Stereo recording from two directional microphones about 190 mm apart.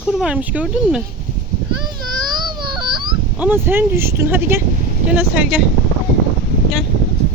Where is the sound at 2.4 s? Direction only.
25° right (ahead or behind).